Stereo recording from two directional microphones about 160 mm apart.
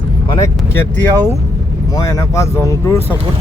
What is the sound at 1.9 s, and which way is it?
Speech, 20° left (ahead or behind).